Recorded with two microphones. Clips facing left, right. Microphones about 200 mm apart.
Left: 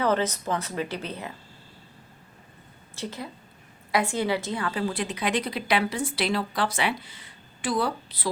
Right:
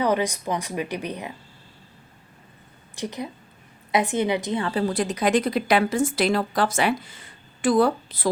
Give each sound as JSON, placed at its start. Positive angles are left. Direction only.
{"t": 0.0, "sound": "a woman's voice", "side_deg": -15}
{"t": 2.9, "sound": "a woman's voice", "side_deg": -15}
{"t": 4.6, "sound": "a woman's voice", "side_deg": -35}